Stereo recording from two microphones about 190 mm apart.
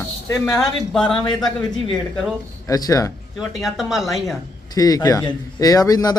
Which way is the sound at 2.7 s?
20° left (ahead or behind).